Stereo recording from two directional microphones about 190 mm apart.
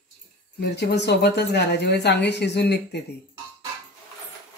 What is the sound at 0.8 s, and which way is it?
Speech, 65° left (ahead or behind).